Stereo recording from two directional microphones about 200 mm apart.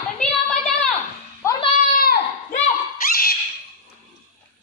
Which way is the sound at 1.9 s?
45° left (ahead or behind).